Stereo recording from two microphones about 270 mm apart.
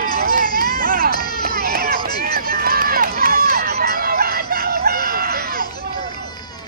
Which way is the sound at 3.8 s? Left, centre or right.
Right.